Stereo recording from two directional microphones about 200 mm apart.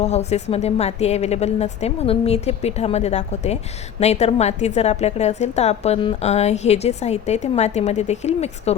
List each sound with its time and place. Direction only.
0.0 s a woman's voice: 35° left (ahead or behind)